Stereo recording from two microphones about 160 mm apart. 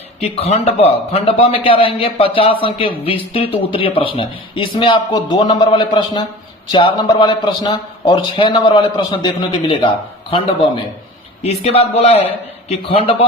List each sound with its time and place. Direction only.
0.2 s a man's voice: 40° left (ahead or behind)